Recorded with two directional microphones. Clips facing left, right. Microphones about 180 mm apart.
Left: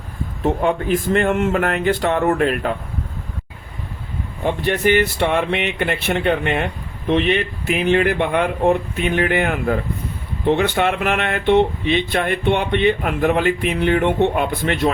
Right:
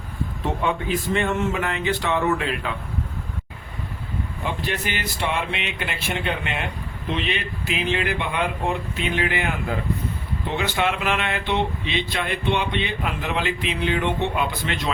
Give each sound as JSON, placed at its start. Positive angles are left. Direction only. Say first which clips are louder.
{"t": 0.6, "sound": "speech", "louder": "left 3 dB", "side_deg": 50}
{"t": 4.6, "sound": "speech", "louder": "left 11 dB", "side_deg": 55}